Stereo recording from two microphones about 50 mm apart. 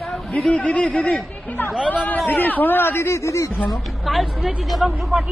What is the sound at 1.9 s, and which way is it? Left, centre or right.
Speech, left.